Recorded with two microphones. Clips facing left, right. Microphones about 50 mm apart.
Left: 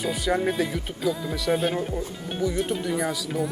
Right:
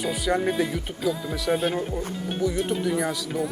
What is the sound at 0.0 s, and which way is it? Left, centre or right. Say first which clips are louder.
Speech: even; centre.